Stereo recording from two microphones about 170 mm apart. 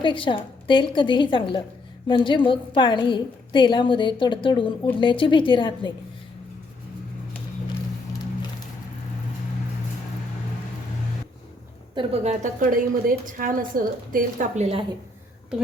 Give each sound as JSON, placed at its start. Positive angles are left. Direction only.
{"t": 0.0, "sound": "a woman's voice", "side_deg": 30}
{"t": 11.9, "sound": "a woman's voice", "side_deg": -40}